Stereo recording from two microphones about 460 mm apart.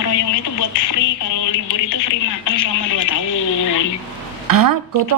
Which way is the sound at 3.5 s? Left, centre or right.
Left.